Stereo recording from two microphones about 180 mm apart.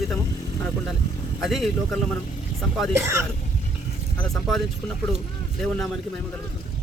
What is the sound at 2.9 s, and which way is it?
Speech, 15° right (ahead or behind).